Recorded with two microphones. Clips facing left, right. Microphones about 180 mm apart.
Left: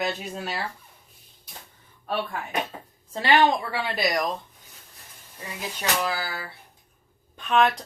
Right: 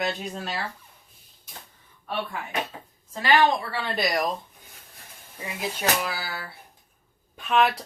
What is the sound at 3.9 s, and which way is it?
Speech, 5° left (ahead or behind).